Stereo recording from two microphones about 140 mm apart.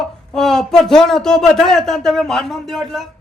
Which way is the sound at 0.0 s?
5° left (ahead or behind).